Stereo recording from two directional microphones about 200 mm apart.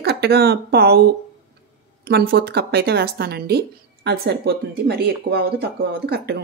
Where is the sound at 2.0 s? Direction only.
50° right (ahead or behind).